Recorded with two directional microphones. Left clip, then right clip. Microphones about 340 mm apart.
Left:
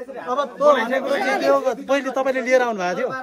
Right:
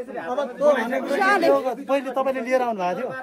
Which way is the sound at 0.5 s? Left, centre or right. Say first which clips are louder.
Left 3 dB; centre.